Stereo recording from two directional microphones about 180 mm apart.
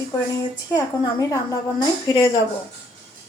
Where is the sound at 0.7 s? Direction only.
20° left (ahead or behind).